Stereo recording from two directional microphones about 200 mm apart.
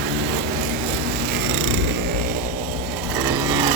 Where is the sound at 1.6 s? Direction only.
70° right (ahead or behind).